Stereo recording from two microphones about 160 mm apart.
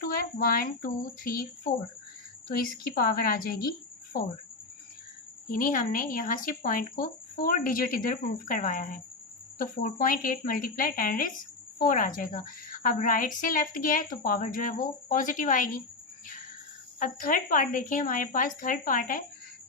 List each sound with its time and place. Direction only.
0.0 s a woman's voice: 65° left (ahead or behind)
2.6 s a woman's voice: 65° left (ahead or behind)
5.5 s a woman's voice: 60° left (ahead or behind)
17.0 s a woman's voice: 60° left (ahead or behind)